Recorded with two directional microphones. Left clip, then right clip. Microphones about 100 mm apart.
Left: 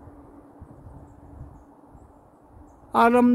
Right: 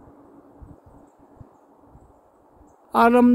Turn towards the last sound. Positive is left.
turn(degrees=-20)  # may be behind; listen again after turning